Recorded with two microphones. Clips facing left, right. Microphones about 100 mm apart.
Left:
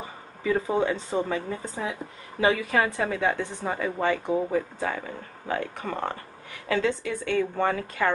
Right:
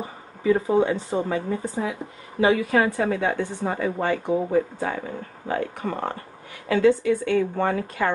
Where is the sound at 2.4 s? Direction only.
25° right (ahead or behind).